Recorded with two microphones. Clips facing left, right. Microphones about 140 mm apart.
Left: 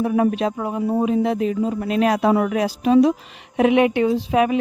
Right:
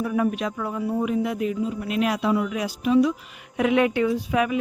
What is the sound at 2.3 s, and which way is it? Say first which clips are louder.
Speech: left 5 dB; 60° left (ahead or behind).